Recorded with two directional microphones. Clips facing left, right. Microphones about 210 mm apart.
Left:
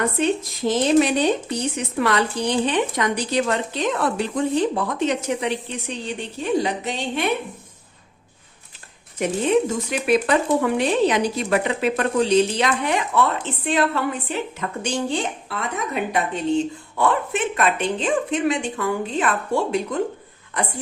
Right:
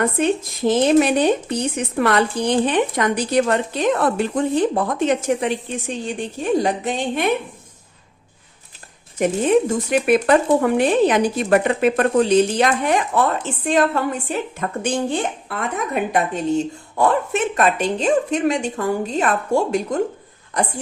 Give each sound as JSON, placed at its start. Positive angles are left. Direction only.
{"t": 0.7, "sound": "speech", "side_deg": -55}
{"t": 9.1, "sound": "speech", "side_deg": -50}